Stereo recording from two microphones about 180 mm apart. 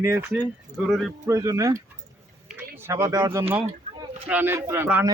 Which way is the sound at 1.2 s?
20° right (ahead or behind).